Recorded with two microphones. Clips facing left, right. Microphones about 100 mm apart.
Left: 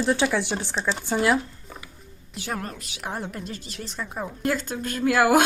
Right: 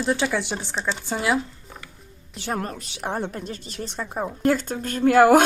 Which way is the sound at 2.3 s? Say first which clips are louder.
Right 3 dB; 35° right (ahead or behind).